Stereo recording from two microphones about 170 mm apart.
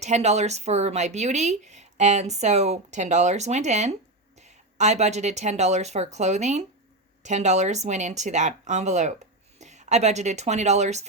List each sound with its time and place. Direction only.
0.0 s speech: 40° right (ahead or behind)